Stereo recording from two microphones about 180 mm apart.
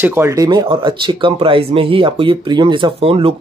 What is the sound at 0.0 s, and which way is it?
Speech, 15° right (ahead or behind).